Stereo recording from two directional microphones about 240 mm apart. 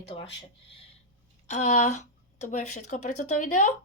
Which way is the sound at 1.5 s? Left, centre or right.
Left.